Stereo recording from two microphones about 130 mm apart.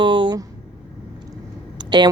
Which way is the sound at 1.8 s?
35° right (ahead or behind).